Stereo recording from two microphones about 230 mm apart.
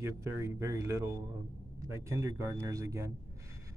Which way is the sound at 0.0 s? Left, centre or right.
Centre.